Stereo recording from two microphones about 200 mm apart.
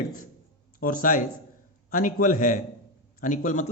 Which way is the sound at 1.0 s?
40° left (ahead or behind).